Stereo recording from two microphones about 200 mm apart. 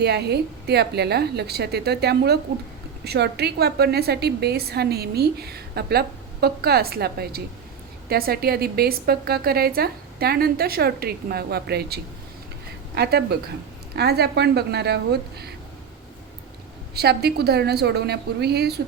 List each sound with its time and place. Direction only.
0.0 s a woman's voice: 55° right (ahead or behind)
16.9 s a woman's voice: 55° right (ahead or behind)